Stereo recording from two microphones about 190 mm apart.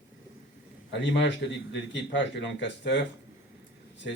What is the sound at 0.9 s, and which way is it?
Speech, 70° left (ahead or behind).